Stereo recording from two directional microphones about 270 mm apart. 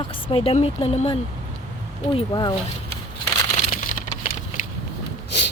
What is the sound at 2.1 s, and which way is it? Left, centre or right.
Speech, centre.